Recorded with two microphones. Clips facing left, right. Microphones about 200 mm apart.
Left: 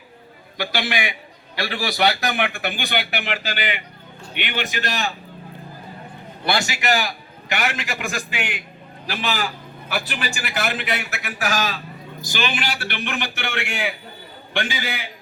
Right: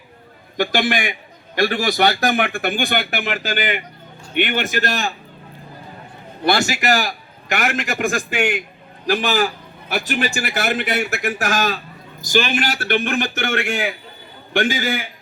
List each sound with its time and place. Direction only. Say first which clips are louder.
0.5 s a man's voice: right 6 dB; 45° right (ahead or behind)
6.4 s a man's voice: right 5 dB; 45° right (ahead or behind)